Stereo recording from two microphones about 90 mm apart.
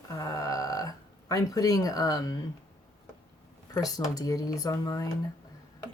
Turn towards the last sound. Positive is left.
turn(degrees=40)  # may be behind; listen again after turning